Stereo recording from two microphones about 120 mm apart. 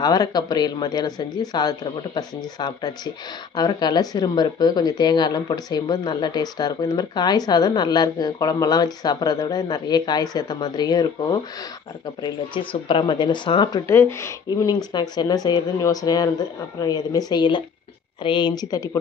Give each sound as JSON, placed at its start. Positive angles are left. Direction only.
{"t": 0.0, "sound": "speech", "side_deg": 35}
{"t": 12.2, "sound": "speech", "side_deg": 45}
{"t": 13.8, "sound": "speech", "side_deg": 20}
{"t": 14.6, "sound": "speech", "side_deg": 35}